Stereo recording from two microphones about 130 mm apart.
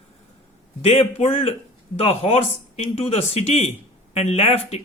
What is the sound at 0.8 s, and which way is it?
Speech, 50° left (ahead or behind).